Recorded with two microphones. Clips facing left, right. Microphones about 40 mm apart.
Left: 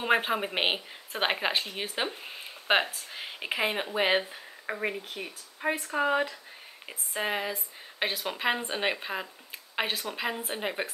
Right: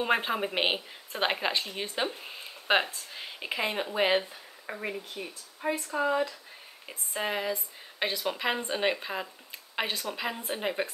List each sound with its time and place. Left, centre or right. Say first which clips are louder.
0.0 s speech: left 1 dB; centre; by 6.3 s left
6.9 s speech: left 1 dB; centre
9.8 s speech: left 1 dB; left